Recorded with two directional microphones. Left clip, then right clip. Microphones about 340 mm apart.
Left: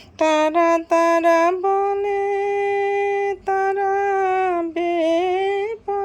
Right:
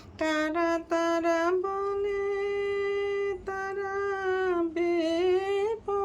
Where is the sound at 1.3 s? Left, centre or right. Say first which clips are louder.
Left 10 dB; centre.